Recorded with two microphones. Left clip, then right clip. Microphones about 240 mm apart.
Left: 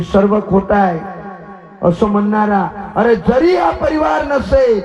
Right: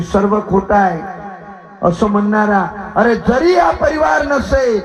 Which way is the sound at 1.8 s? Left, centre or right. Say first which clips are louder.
Even; left.